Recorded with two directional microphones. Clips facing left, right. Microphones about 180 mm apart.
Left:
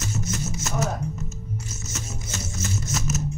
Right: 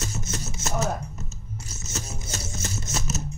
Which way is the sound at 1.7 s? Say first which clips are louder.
Left 1 dB; 35° right (ahead or behind).